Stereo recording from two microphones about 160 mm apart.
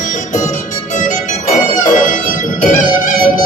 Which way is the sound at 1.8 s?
55° left (ahead or behind).